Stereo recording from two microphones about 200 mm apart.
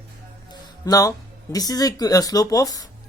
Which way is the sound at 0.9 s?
20° left (ahead or behind).